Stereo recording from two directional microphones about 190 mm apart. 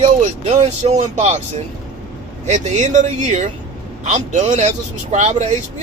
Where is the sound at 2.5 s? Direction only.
40° right (ahead or behind).